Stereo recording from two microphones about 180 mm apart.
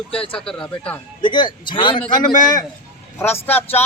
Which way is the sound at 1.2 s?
25° left (ahead or behind).